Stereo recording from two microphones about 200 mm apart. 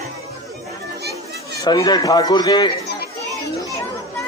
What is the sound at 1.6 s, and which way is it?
A man's voice, 20° left (ahead or behind).